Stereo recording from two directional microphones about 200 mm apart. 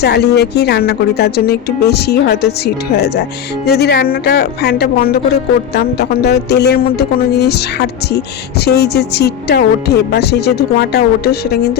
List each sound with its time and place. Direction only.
0.0 s a woman's voice: 55° left (ahead or behind)